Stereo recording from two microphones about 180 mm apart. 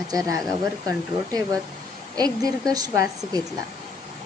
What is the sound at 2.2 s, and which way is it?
Speech, 20° right (ahead or behind).